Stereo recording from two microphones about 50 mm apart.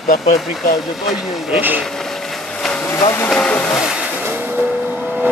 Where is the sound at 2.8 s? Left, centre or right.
Left.